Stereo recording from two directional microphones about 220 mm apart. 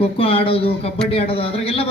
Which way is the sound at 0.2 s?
25° left (ahead or behind).